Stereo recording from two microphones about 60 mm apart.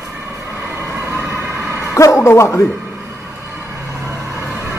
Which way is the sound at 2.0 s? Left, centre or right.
Left.